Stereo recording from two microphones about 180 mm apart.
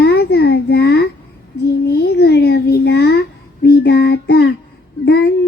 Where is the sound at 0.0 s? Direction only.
65° left (ahead or behind).